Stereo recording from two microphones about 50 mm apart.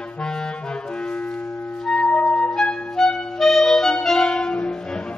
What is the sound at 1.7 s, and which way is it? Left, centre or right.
Flute, centre.